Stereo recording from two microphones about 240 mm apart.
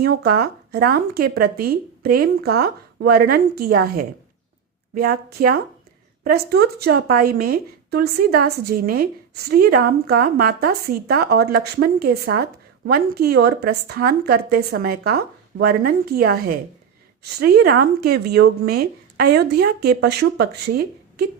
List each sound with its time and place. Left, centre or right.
0.0 s a woman's voice: right